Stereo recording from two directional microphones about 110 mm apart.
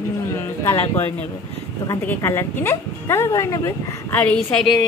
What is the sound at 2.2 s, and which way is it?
Speech, 20° left (ahead or behind).